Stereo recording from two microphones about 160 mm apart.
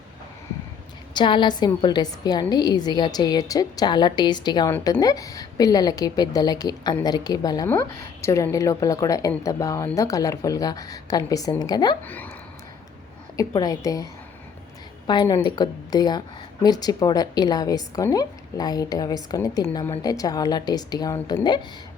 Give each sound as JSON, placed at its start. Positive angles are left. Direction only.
{"t": 1.1, "sound": "speech", "side_deg": 30}
{"t": 12.0, "sound": "speech", "side_deg": 10}
{"t": 13.3, "sound": "speech", "side_deg": 20}